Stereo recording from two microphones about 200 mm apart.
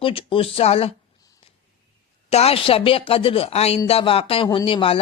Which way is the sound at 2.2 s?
30° left (ahead or behind).